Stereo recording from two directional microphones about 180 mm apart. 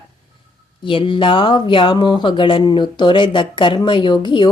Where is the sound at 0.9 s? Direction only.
30° left (ahead or behind).